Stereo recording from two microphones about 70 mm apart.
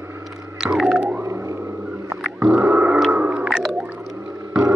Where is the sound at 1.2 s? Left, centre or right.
Right.